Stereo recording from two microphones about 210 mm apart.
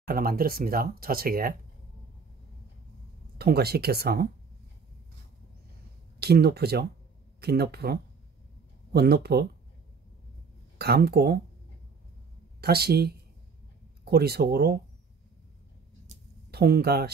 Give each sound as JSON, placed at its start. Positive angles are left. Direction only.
{"t": 0.1, "sound": "speech", "side_deg": -45}
{"t": 3.3, "sound": "speech", "side_deg": -50}
{"t": 6.1, "sound": "speech", "side_deg": -50}
{"t": 10.8, "sound": "speech", "side_deg": -50}
{"t": 12.5, "sound": "speech", "side_deg": -50}
{"t": 16.4, "sound": "speech", "side_deg": -50}